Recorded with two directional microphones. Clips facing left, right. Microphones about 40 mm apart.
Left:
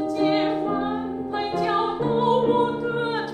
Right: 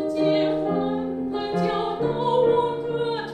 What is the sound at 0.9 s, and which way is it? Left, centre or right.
Music, left.